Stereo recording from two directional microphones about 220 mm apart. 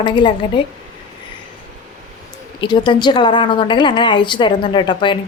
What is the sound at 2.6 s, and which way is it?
A woman's voice, 20° left (ahead or behind).